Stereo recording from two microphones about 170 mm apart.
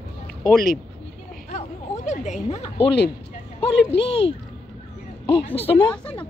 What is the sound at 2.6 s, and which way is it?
Speech, 30° left (ahead or behind).